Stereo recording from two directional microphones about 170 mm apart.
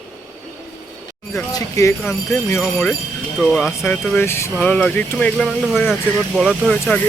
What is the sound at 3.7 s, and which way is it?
Speech, 15° left (ahead or behind).